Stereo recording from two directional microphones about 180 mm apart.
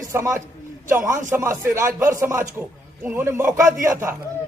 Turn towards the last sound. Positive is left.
turn(degrees=-15)  # may be behind; listen again after turning